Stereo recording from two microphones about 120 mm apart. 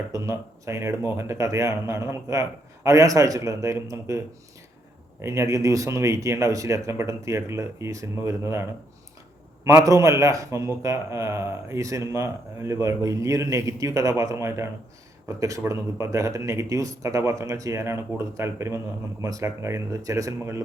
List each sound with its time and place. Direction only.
0.1 s a man's voice: 25° right (ahead or behind)
5.2 s a man's voice: 25° right (ahead or behind)
9.6 s a man's voice: 25° right (ahead or behind)